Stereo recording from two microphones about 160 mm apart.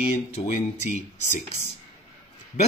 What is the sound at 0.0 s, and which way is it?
Mantra, 40° left (ahead or behind).